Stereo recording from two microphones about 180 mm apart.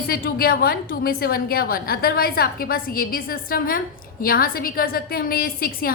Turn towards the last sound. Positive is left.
turn(degrees=55)  # may be behind; listen again after turning